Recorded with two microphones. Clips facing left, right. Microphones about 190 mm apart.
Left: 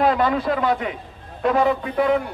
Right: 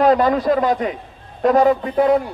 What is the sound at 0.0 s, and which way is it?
A man's voice, 40° right (ahead or behind).